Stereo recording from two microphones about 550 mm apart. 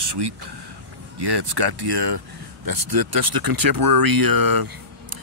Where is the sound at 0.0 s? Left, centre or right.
Right.